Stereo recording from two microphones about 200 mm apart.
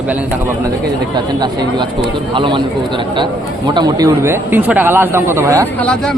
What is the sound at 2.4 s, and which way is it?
Speech, 25° right (ahead or behind).